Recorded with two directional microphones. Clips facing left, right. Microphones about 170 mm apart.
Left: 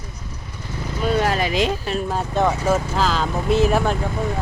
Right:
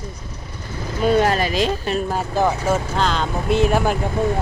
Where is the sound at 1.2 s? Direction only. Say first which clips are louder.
Right 2 dB; 5° left (ahead or behind).